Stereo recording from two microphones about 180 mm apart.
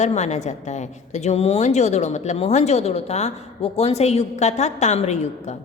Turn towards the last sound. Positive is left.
turn(degrees=40)  # may be behind; listen again after turning